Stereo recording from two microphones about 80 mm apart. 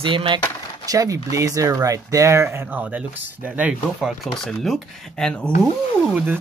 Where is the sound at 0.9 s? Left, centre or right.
Right.